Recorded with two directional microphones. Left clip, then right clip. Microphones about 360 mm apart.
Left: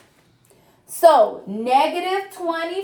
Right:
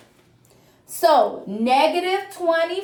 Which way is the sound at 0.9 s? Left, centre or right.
Centre.